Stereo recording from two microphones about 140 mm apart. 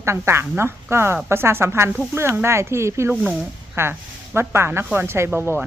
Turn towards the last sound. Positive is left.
turn(degrees=-15)  # may be behind; listen again after turning